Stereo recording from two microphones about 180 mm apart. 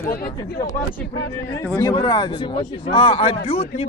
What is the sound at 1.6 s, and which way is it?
Speech, 15° left (ahead or behind).